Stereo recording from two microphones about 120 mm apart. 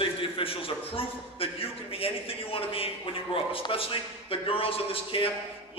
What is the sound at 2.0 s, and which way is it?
A man's voice, 50° left (ahead or behind).